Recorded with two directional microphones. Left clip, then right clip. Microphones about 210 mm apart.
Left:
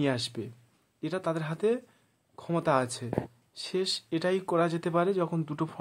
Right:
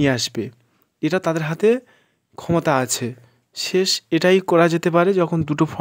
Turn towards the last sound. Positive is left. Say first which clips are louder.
# right 12 dB
turn(degrees=-35)  # may be behind; listen again after turning